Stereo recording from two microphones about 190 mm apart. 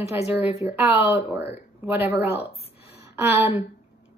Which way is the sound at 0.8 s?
10° right (ahead or behind).